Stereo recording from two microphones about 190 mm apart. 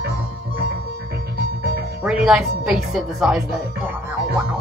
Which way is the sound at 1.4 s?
55° right (ahead or behind).